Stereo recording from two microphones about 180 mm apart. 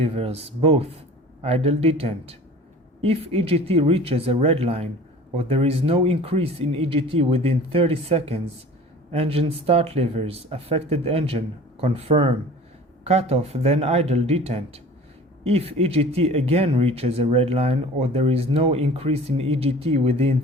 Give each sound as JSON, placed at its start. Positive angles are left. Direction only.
{"t": 0.0, "sound": "speech", "side_deg": -35}